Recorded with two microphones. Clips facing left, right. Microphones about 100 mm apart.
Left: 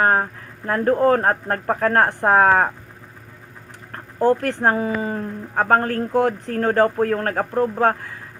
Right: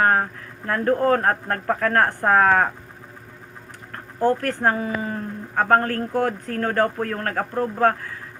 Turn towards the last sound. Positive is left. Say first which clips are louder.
# left 2 dB
turn(degrees=15)  # may be behind; listen again after turning